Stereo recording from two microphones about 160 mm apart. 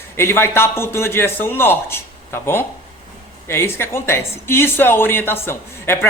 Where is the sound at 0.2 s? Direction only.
15° left (ahead or behind).